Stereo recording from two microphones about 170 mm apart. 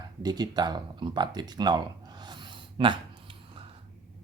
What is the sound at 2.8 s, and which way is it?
Speech, 30° right (ahead or behind).